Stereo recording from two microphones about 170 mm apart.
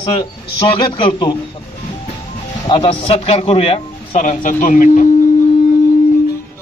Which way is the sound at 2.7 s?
30° left (ahead or behind).